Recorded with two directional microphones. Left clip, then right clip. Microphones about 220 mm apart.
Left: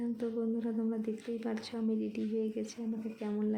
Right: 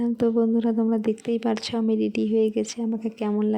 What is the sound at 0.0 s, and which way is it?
Speech, 35° right (ahead or behind).